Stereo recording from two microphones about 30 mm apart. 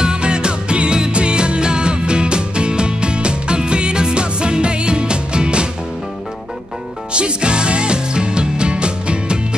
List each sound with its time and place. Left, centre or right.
0.0 s music: right
7.2 s music: right